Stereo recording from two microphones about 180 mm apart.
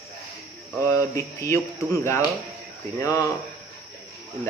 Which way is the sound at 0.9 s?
15° left (ahead or behind).